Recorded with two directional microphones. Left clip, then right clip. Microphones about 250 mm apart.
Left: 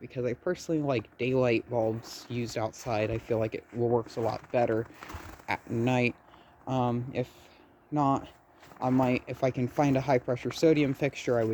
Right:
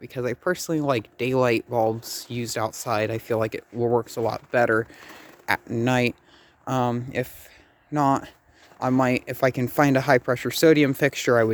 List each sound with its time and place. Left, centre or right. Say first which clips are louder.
0.0 s speech: right 5 dB; right